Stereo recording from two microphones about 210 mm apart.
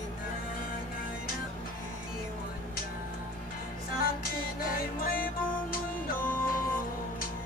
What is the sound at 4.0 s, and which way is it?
Music, 45° left (ahead or behind).